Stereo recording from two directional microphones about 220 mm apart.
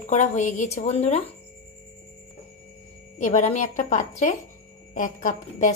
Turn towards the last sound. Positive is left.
turn(degrees=35)  # may be behind; listen again after turning